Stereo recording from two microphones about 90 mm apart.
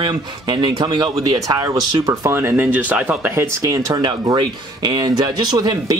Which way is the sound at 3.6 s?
40° right (ahead or behind).